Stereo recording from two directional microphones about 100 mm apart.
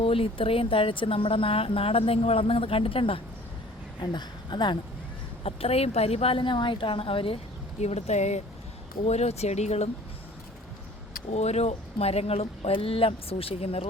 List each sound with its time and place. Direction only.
0.0 s speech: 65° left (ahead or behind)
4.0 s speech: 50° left (ahead or behind)
5.4 s speech: 80° left
7.8 s speech: 90° left
11.3 s speech: 90° left